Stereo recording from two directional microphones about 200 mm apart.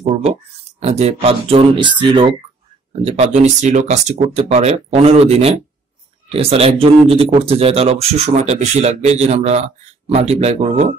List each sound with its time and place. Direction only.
0.0 s speech: 30° right (ahead or behind)